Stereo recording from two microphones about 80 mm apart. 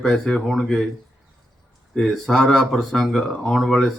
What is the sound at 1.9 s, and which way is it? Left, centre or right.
Speech, centre.